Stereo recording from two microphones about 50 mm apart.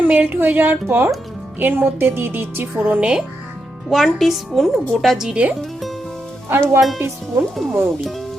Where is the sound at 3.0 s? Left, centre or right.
Centre.